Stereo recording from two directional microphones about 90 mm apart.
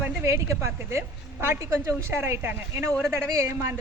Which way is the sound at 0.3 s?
30° right (ahead or behind).